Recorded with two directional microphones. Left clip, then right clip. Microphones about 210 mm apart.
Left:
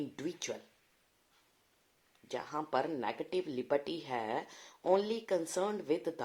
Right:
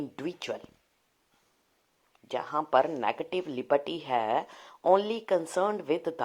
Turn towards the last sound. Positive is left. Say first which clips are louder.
# right 6 dB
turn(degrees=-25)  # may be behind; listen again after turning